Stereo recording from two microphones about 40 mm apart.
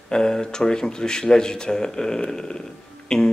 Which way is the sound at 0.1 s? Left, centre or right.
Centre.